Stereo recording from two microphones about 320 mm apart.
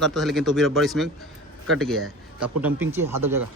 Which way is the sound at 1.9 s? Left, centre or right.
Right.